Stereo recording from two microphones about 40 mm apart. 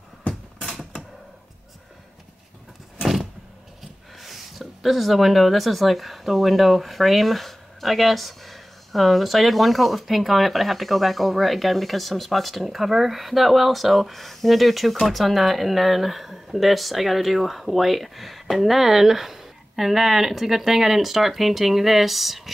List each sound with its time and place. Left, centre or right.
3.8 s speech: centre